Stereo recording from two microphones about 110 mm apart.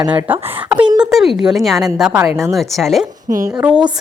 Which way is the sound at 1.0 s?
5° right (ahead or behind).